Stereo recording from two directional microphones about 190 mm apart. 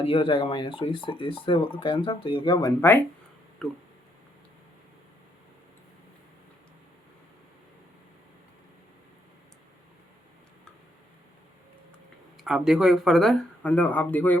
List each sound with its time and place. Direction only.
0.0 s speech: 25° left (ahead or behind)
3.6 s speech: centre (ahead or behind)
12.4 s speech: 5° right (ahead or behind)